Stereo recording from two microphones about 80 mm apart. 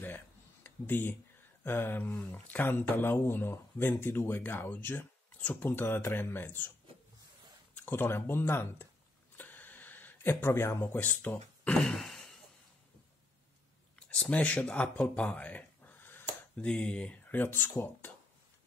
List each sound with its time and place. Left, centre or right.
0.7 s speech: left
7.7 s speech: left
9.4 s a sound: left; by 12.4 s centre
13.9 s a sound: centre; by 16.6 s left
16.6 s speech: centre
17.3 s speech: left